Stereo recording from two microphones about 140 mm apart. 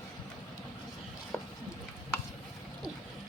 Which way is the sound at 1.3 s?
10° left (ahead or behind).